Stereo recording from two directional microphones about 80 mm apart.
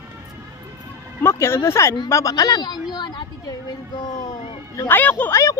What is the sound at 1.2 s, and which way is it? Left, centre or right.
Speech, left.